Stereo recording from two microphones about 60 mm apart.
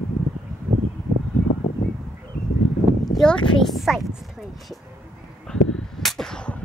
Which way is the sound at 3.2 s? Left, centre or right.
Centre.